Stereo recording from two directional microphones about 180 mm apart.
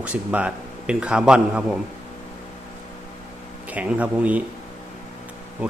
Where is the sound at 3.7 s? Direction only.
5° right (ahead or behind).